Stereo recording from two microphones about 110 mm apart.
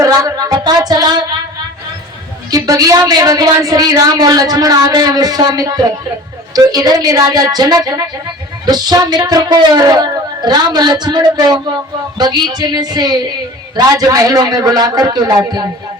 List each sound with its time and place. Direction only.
0.0 s music: 30° right (ahead or behind)
2.5 s a woman's voice: 35° right (ahead or behind)